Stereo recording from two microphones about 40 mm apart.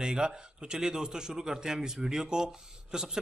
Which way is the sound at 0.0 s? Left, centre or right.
Centre.